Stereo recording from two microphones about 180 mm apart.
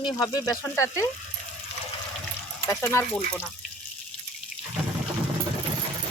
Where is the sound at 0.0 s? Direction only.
20° left (ahead or behind).